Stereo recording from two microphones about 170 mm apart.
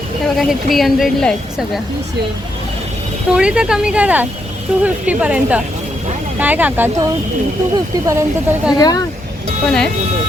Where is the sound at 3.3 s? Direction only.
5° right (ahead or behind).